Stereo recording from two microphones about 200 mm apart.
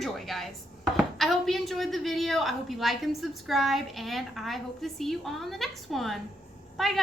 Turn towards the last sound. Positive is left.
turn(degrees=0)  # may be behind; listen again after turning